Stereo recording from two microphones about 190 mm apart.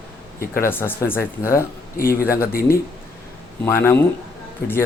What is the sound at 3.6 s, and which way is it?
Speech, 10° left (ahead or behind).